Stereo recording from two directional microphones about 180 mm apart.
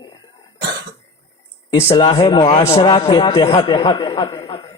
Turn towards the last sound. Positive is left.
turn(degrees=25)  # may be behind; listen again after turning